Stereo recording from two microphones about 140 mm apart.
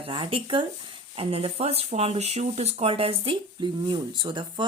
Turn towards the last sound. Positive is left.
turn(degrees=-35)  # may be behind; listen again after turning